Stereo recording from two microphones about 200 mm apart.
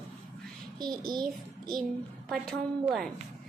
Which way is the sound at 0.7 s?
20° right (ahead or behind).